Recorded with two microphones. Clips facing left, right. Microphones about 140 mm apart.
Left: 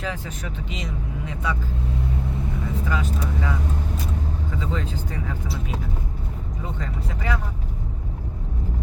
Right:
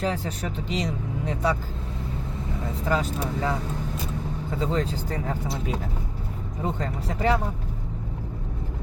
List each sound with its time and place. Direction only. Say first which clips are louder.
0.0 s speech: right 4 dB; 35° right (ahead or behind)
2.9 s speech: right 5 dB; 35° right (ahead or behind)
4.6 s speech: right 6 dB; 35° right (ahead or behind)
6.7 s speech: right 3 dB; 35° right (ahead or behind)